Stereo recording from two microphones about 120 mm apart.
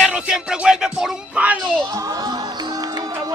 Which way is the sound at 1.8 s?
25° right (ahead or behind).